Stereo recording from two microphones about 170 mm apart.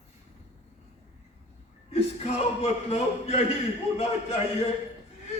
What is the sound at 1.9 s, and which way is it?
A man's voice, 40° left (ahead or behind).